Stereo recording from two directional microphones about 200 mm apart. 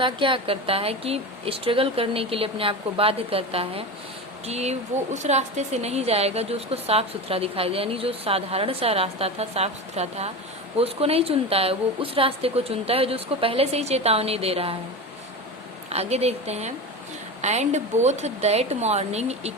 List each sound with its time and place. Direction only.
0.0 s a woman's voice: 25° right (ahead or behind)
15.9 s a woman's voice: 30° right (ahead or behind)